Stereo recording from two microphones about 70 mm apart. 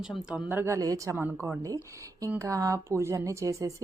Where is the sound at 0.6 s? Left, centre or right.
Right.